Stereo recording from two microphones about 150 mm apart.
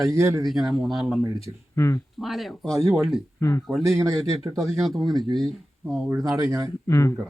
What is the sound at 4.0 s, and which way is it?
Speech, 20° right (ahead or behind).